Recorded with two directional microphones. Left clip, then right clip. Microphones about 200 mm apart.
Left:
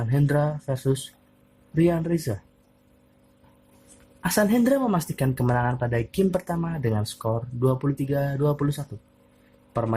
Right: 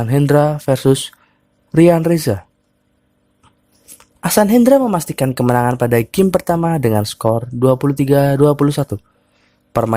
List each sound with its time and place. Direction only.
0.0 s speech: 50° right (ahead or behind)
4.2 s speech: 50° right (ahead or behind)